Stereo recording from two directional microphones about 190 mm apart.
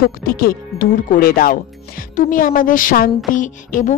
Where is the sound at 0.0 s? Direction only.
50° left (ahead or behind).